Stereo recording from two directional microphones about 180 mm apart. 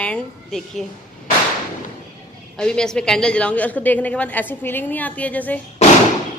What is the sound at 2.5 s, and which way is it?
A woman's voice, 5° left (ahead or behind).